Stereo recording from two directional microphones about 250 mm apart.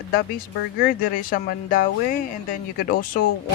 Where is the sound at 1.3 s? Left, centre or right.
Left.